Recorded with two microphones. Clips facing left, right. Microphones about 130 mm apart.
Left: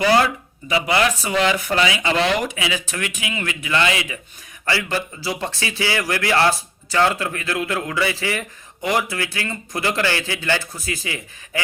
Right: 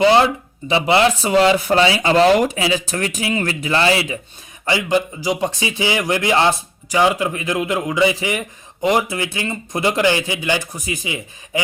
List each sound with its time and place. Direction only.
0.0 s speech: 25° right (ahead or behind)
4.6 s a man's voice: 20° right (ahead or behind)